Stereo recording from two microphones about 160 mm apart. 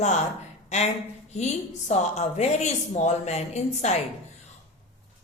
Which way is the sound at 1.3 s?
45° left (ahead or behind).